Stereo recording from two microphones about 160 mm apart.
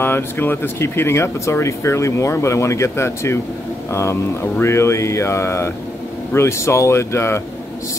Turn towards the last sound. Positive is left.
turn(degrees=15)  # may be behind; listen again after turning